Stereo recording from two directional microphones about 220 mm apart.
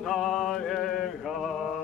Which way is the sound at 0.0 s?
Centre (ahead or behind).